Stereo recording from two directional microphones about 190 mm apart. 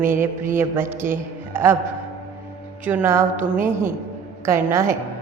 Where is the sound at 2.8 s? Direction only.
10° right (ahead or behind).